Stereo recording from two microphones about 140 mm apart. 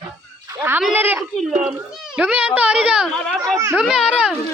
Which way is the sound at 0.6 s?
15° right (ahead or behind).